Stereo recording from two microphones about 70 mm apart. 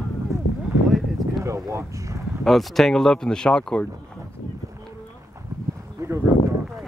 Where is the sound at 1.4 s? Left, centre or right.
Right.